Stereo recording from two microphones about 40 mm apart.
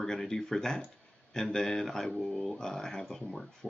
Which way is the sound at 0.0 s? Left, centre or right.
Centre.